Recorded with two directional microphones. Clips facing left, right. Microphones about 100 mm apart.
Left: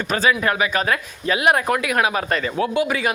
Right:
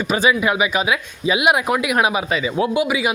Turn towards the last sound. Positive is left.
turn(degrees=-10)  # may be behind; listen again after turning